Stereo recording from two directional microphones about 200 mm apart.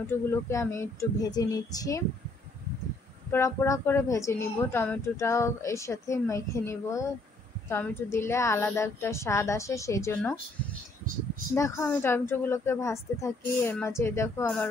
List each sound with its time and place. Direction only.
0.0 s a woman's voice: 10° left (ahead or behind)
3.3 s a woman's voice: 15° left (ahead or behind)
11.5 s a woman's voice: 15° left (ahead or behind)